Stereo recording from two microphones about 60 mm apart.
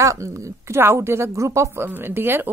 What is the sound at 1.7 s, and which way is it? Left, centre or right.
Speech, right.